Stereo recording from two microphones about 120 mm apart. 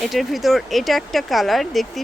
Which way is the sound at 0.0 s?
Centre (ahead or behind).